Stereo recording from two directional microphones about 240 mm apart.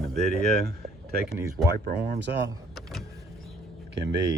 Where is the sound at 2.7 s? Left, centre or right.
Centre.